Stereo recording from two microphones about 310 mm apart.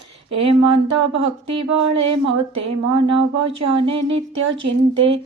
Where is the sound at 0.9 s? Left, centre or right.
Right.